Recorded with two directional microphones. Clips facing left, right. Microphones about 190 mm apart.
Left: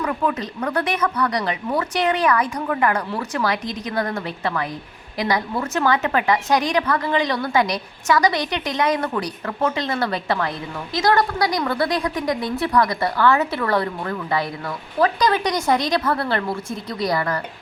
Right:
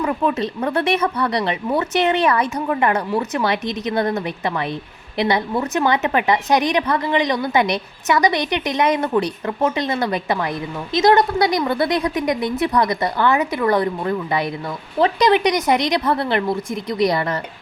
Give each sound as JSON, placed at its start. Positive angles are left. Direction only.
{"t": 0.0, "sound": "a woman's voice", "side_deg": -25}